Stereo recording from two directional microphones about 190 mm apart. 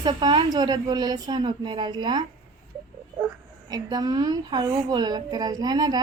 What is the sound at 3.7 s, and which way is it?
A woman's voice, 20° right (ahead or behind).